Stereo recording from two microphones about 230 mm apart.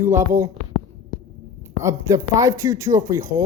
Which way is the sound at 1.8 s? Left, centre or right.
Centre.